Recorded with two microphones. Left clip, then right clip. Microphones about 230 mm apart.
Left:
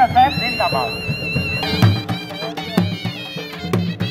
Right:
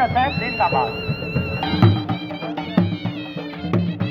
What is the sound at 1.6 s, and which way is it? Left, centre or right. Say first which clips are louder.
Music: left 1 dB; left.